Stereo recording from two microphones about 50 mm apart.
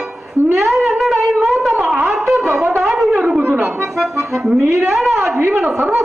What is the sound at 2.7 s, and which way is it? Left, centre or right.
Wind instrument, centre.